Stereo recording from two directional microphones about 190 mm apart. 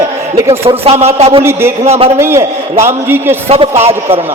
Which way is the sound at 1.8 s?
30° right (ahead or behind).